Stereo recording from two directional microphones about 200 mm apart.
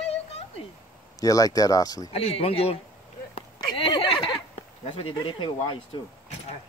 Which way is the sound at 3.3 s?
25° left (ahead or behind).